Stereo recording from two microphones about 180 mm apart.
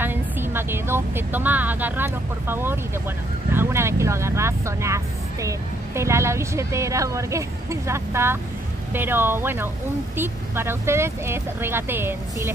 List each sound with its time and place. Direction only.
0.0 s speech: 10° right (ahead or behind)